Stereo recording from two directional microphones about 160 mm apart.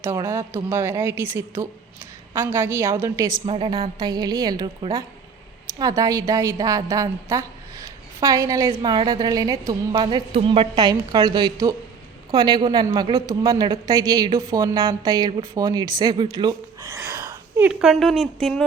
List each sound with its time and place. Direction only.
0.0 s a woman's voice: 15° right (ahead or behind)
3.4 s a woman's voice: 35° right (ahead or behind); by 17.7 s 15° right (ahead or behind)
17.7 s speech: 5° right (ahead or behind)